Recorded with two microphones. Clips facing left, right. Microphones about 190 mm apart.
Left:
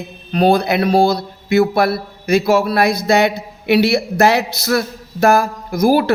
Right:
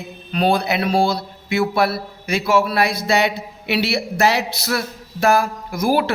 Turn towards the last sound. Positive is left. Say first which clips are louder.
# left 5 dB
turn(degrees=40)  # may be behind; listen again after turning